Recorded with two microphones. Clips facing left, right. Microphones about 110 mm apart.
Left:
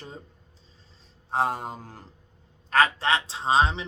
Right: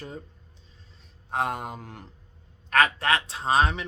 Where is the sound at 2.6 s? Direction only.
30° left (ahead or behind).